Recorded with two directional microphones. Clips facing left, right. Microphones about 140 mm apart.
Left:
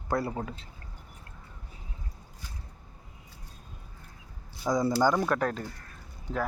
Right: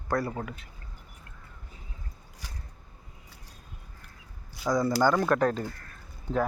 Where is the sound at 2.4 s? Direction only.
90° right.